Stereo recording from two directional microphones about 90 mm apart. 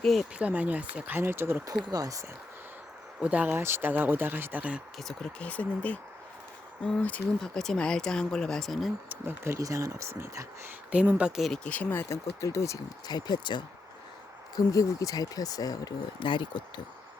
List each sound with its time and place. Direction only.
0.0 s speech: 5° left (ahead or behind)
0.3 s speech: 15° right (ahead or behind)
1.8 s speech: 45° right (ahead or behind)
3.2 s speech: 15° right (ahead or behind)
4.9 s speech: 5° left (ahead or behind)
5.4 s speech: 15° left (ahead or behind)
9.0 s speech: 25° right (ahead or behind)
10.9 s speech: 15° right (ahead or behind)
11.6 s speech: 15° left (ahead or behind); by 12.8 s 35° left (ahead or behind)
13.1 s speech: 50° left (ahead or behind)
14.5 s speech: 40° left (ahead or behind)
16.2 s speech: 60° left (ahead or behind)